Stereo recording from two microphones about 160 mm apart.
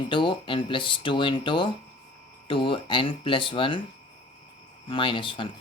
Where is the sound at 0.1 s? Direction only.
30° left (ahead or behind).